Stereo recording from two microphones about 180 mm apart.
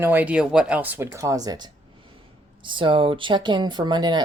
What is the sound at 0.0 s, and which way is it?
Speech, 10° right (ahead or behind).